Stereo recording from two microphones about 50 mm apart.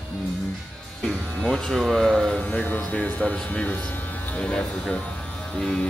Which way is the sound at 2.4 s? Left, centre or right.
Left.